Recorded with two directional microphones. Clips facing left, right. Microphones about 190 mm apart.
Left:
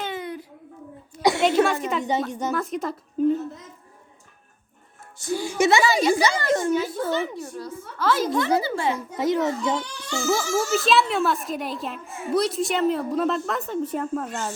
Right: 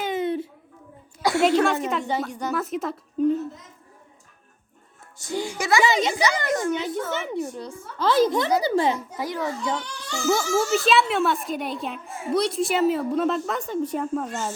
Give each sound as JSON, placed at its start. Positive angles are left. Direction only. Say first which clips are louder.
{"t": 0.0, "sound": "a sound", "louder": "right 6 dB", "side_deg": -20}
{"t": 1.2, "sound": "a sound", "louder": "left 2 dB", "side_deg": 20}
{"t": 1.6, "sound": "a woman's voice", "louder": "even", "side_deg": 0}
{"t": 5.3, "sound": "a woman's voice", "louder": "left 1 dB", "side_deg": -20}
{"t": 5.5, "sound": "a child's voice", "louder": "left 4 dB", "side_deg": 25}
{"t": 5.8, "sound": "a woman's voice", "louder": "left 2 dB", "side_deg": -20}
{"t": 6.5, "sound": "a child's voice", "louder": "left 2 dB", "side_deg": 25}
{"t": 6.7, "sound": "a woman's voice", "louder": "left 3 dB", "side_deg": -20}
{"t": 9.1, "sound": "a child's voice", "louder": "left 6 dB", "side_deg": 20}
{"t": 10.2, "sound": "a woman's voice", "louder": "right 2 dB", "side_deg": 0}